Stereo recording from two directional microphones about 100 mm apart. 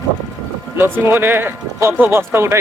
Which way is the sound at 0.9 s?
20° right (ahead or behind).